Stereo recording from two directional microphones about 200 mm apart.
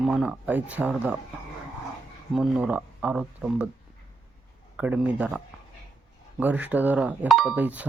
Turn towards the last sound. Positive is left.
turn(degrees=-5)  # may be behind; listen again after turning